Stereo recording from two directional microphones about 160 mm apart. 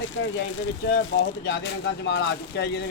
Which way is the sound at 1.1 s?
90° left.